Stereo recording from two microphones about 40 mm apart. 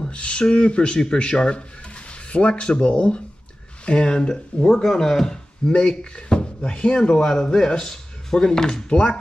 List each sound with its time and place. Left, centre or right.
0.0 s speech: left
5.7 s speech: left